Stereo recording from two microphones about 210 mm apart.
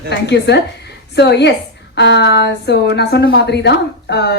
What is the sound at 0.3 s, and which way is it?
A woman's voice, 55° left (ahead or behind).